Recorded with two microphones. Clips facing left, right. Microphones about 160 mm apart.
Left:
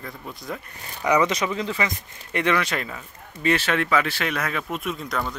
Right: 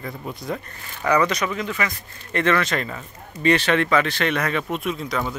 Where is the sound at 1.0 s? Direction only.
20° left (ahead or behind).